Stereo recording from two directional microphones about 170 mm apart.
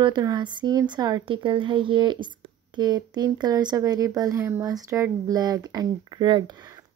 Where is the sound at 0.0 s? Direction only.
25° right (ahead or behind).